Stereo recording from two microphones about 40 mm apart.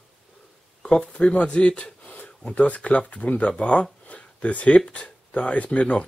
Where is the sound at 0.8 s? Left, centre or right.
Left.